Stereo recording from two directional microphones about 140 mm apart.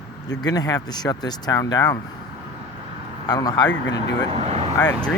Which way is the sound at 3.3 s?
30° left (ahead or behind).